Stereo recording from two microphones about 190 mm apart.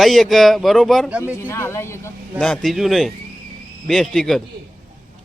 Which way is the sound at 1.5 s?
15° left (ahead or behind).